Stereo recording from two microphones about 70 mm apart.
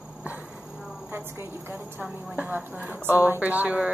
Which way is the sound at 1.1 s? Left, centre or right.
Right.